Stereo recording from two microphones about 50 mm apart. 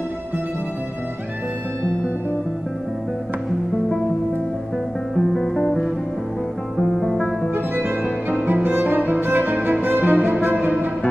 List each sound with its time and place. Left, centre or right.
5.1 s music: centre
7.5 s music: right